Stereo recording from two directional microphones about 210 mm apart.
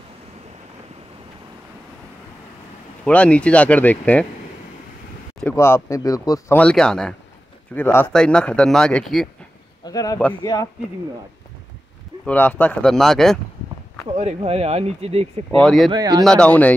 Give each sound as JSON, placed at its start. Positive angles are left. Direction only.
{"t": 3.1, "sound": "speech", "side_deg": 5}
{"t": 5.4, "sound": "speech", "side_deg": 10}
{"t": 6.6, "sound": "speech", "side_deg": 5}
{"t": 9.8, "sound": "speech", "side_deg": 15}
{"t": 12.3, "sound": "speech", "side_deg": 5}
{"t": 14.1, "sound": "speech", "side_deg": -30}
{"t": 15.6, "sound": "speech", "side_deg": 0}
{"t": 15.9, "sound": "speech", "side_deg": -20}
{"t": 16.3, "sound": "speech", "side_deg": 5}